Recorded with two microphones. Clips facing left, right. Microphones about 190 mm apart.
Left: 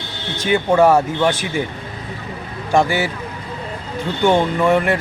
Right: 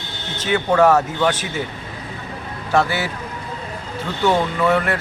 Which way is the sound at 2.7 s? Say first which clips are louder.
Left 3 dB; 15° left (ahead or behind).